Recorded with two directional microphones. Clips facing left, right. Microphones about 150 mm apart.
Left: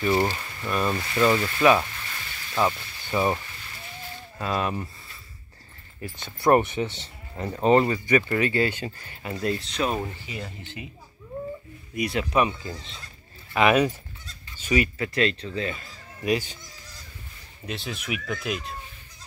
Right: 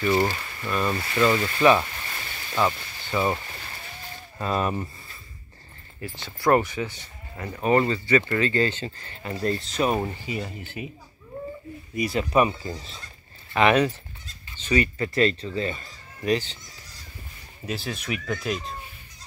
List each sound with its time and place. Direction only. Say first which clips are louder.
0.0 s speech: right 1 dB; 10° left (ahead or behind)
4.4 s speech: right 1 dB; centre (ahead or behind)
6.1 s speech: left 1 dB; 20° left (ahead or behind)
9.3 s speech: right 1 dB; centre (ahead or behind)
11.9 s speech: right 2 dB; centre (ahead or behind)
13.5 s speech: even; 10° left (ahead or behind)
15.1 s speech: right 3 dB; centre (ahead or behind)
17.6 s speech: right 2 dB; centre (ahead or behind)